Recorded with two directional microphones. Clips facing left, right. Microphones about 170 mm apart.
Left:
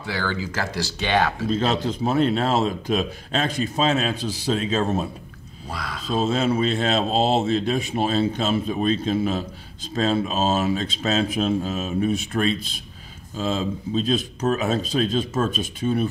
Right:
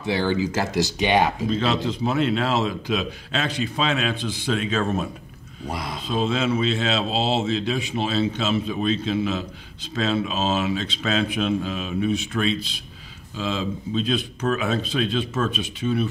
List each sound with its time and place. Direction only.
0.0 s speech: 20° right (ahead or behind)
1.5 s a man's voice: 45° left (ahead or behind)
5.7 s speech: 20° right (ahead or behind)
6.0 s a man's voice: 45° left (ahead or behind)